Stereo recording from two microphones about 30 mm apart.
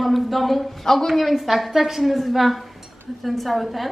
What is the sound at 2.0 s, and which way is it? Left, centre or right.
A woman's voice, centre.